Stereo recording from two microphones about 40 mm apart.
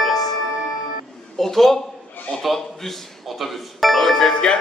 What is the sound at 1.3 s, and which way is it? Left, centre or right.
Speech, centre.